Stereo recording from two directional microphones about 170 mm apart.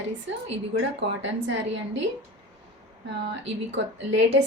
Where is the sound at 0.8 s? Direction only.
90° right.